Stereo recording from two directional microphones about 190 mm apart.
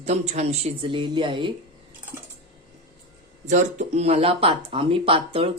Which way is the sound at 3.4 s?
40° right (ahead or behind).